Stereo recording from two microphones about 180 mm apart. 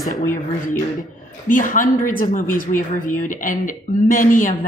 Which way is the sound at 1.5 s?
50° left (ahead or behind).